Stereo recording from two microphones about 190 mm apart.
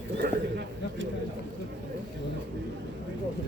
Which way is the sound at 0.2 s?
65° right (ahead or behind).